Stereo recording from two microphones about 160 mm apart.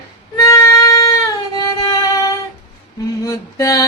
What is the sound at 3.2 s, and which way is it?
Mantra, 20° left (ahead or behind).